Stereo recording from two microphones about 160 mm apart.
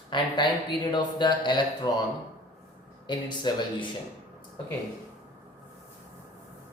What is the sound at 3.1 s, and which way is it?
Speech, 30° left (ahead or behind).